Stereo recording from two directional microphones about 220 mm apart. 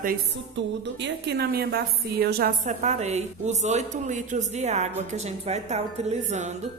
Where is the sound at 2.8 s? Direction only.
30° right (ahead or behind).